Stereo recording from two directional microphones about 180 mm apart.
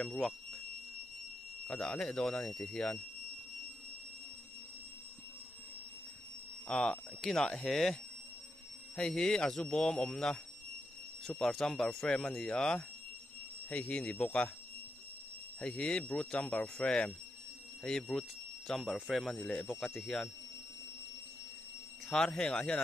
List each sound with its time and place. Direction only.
0.0 s speech: 5° left (ahead or behind)
1.7 s speech: 5° left (ahead or behind)
6.7 s speech: 5° left (ahead or behind)
15.6 s speech: 5° left (ahead or behind)
22.1 s speech: 5° left (ahead or behind)